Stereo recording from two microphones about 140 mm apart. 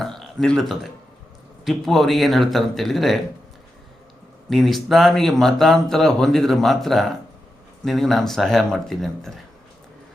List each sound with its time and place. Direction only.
0.0 s burping: centre (ahead or behind)
1.6 s speech: centre (ahead or behind)
4.4 s speech: centre (ahead or behind)